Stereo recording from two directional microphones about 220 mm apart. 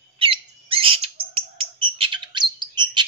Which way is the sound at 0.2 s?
25° right (ahead or behind).